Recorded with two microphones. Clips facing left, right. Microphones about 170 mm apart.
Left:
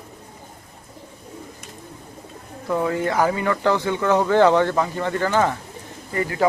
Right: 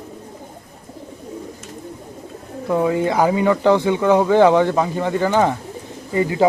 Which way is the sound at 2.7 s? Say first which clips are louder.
Right 4 dB; 15° right (ahead or behind).